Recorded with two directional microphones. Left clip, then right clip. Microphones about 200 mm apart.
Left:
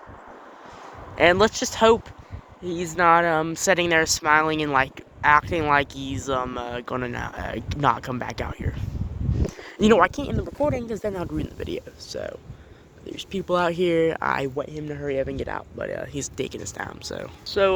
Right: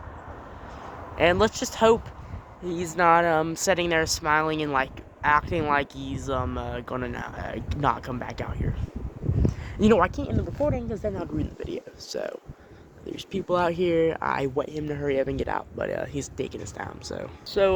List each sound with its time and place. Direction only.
1.1 s speech: 15° left (ahead or behind)
10.2 s speech: 35° left (ahead or behind)
11.1 s speech: 15° left (ahead or behind)
12.0 s speech: 20° right (ahead or behind)
13.1 s a sound: 10° right (ahead or behind)
13.5 s speech: 5° left (ahead or behind)
14.5 s speech: 20° right (ahead or behind)
16.1 s speech: 5° left (ahead or behind)